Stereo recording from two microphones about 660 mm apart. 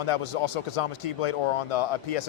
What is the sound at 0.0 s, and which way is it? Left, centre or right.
Speech, left.